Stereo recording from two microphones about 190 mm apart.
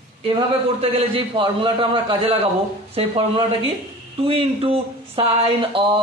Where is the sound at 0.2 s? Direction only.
30° right (ahead or behind).